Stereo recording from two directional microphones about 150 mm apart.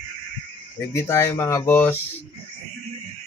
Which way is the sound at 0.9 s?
20° left (ahead or behind).